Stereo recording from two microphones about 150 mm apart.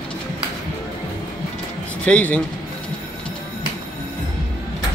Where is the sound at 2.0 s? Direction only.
10° left (ahead or behind).